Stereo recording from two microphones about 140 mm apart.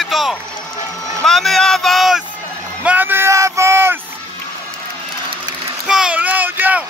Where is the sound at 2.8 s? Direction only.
15° right (ahead or behind).